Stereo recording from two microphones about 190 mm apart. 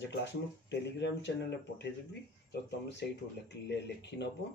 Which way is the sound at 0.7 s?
65° left (ahead or behind).